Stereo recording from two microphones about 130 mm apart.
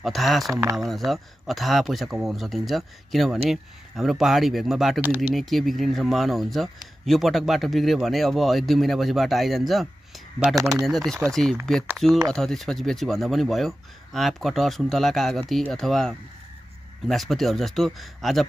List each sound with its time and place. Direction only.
0.0 s speech: centre (ahead or behind)
5.0 s speech: 15° right (ahead or behind)
5.3 s speech: centre (ahead or behind)
10.5 s speech: 25° right (ahead or behind)
11.2 s speech: 5° left (ahead or behind)